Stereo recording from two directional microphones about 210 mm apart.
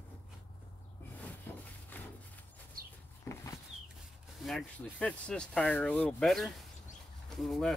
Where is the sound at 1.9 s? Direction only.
10° left (ahead or behind).